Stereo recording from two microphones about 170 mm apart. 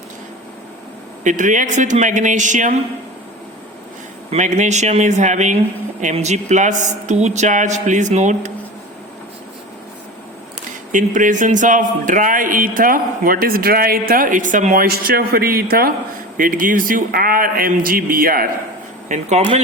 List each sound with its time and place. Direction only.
1.2 s speech: 50° right (ahead or behind)
4.3 s speech: 45° right (ahead or behind)
10.9 s speech: 50° right (ahead or behind)
19.0 s speech: 45° right (ahead or behind)